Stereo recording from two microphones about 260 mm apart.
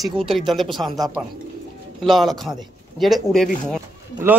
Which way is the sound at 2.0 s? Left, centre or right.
Centre.